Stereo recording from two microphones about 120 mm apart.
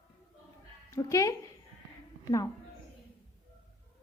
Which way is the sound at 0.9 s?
25° left (ahead or behind).